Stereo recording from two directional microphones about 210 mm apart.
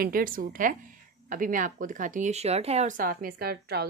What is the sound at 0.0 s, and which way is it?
Speech, 40° right (ahead or behind).